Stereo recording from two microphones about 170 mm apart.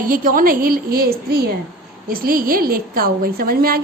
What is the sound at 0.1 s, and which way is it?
A woman's voice, 55° right (ahead or behind).